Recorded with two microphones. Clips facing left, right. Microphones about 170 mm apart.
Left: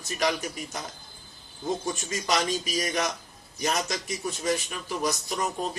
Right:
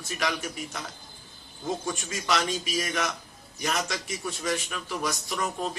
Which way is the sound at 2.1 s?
40° left (ahead or behind).